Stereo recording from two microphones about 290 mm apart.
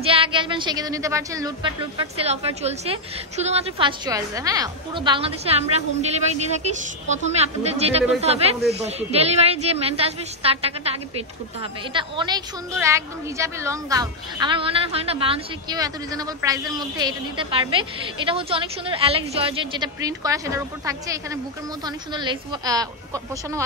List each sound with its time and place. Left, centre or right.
0.0 s a woman's voice: centre